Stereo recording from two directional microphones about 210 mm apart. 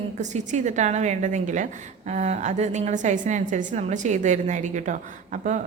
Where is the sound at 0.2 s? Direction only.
35° right (ahead or behind).